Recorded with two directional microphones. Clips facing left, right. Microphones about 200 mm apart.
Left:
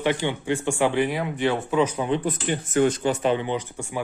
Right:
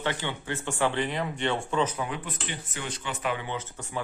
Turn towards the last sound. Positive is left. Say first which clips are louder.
# left 6 dB
turn(degrees=10)  # may be behind; listen again after turning